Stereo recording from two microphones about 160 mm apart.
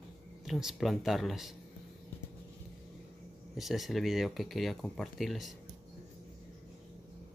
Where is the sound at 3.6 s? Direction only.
Centre (ahead or behind).